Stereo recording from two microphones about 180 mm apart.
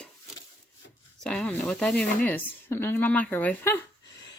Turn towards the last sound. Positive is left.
turn(degrees=10)  # may be behind; listen again after turning